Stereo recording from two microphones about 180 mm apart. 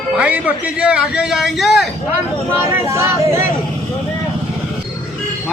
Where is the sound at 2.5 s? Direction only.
15° right (ahead or behind).